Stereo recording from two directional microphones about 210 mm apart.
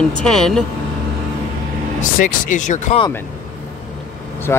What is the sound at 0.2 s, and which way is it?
Speech, centre (ahead or behind).